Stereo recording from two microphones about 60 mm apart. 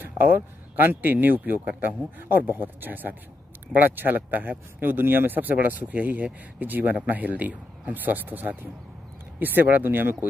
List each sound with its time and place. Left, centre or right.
0.0 s speech: right